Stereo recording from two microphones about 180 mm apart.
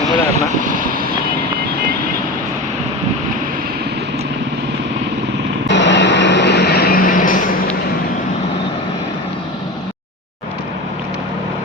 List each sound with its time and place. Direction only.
0.6 s speech: 50° right (ahead or behind)
5.6 s vehicle: 80° left; by 7.5 s 50° left (ahead or behind)